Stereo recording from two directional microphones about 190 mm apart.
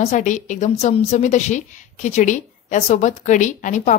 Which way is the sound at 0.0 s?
40° left (ahead or behind).